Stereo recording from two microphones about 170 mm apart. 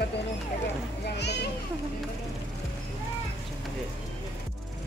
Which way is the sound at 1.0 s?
80° left.